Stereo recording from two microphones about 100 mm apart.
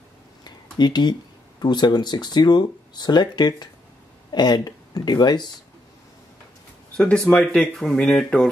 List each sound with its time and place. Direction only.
0.4 s a sound: 45° left (ahead or behind)
1.6 s speech: 45° left (ahead or behind)
7.0 s speech: 10° left (ahead or behind)